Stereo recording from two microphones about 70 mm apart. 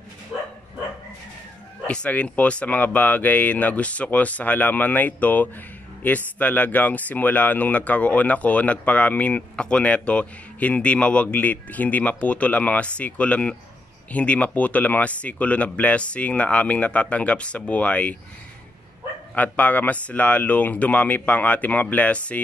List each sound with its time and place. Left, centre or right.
1.9 s speech: centre
19.3 s speech: left